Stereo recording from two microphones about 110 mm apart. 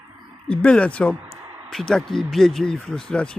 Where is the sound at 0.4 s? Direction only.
10° left (ahead or behind).